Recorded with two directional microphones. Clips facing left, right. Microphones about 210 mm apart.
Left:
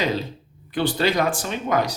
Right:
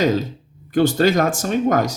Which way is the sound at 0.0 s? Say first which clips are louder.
Right 6 dB; 45° right (ahead or behind).